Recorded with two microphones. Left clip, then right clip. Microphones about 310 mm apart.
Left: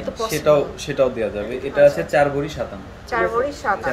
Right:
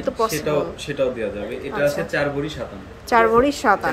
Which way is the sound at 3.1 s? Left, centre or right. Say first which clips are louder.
Right 5 dB; right.